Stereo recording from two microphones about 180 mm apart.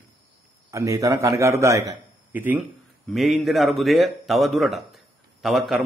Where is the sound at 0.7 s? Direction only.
15° right (ahead or behind).